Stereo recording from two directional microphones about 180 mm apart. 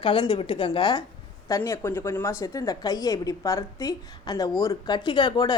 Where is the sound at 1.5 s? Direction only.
15° left (ahead or behind).